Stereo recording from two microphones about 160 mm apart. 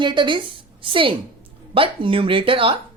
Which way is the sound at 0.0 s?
30° right (ahead or behind).